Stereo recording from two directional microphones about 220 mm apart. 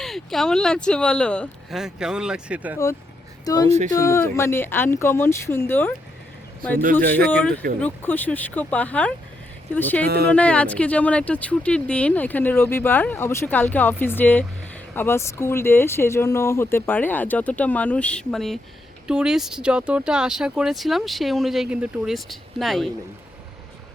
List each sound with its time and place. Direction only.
0.0 s speech: centre (ahead or behind)
3.4 s speech: 15° left (ahead or behind)
3.7 s speech: 30° right (ahead or behind)
3.9 s speech: 15° left (ahead or behind)
7.3 s speech: 5° left (ahead or behind)
10.1 s speech: 50° right (ahead or behind)
10.3 s speech: 5° left (ahead or behind)